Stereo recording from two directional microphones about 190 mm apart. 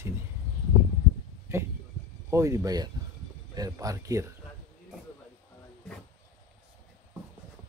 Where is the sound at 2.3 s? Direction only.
15° right (ahead or behind).